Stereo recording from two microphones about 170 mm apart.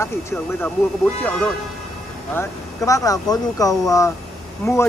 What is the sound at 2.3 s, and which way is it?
Speech, 20° left (ahead or behind).